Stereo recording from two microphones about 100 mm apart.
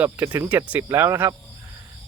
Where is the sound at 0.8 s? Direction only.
25° right (ahead or behind).